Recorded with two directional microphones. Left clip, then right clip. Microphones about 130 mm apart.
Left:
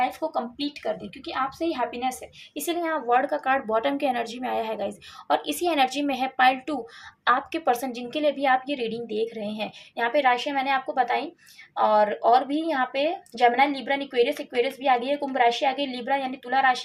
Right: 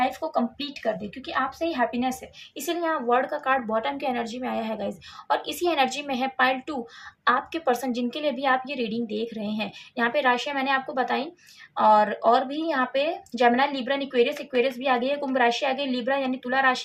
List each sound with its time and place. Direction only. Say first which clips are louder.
0.0 s a woman's voice: right 1 dB; 30° left (ahead or behind)